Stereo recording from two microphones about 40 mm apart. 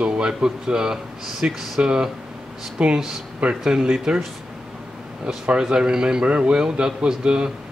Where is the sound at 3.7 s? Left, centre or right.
Centre.